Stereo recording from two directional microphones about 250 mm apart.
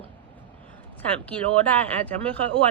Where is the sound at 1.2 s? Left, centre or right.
Centre.